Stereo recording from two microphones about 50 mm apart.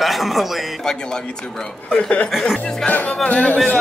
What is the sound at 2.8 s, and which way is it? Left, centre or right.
Speech, left.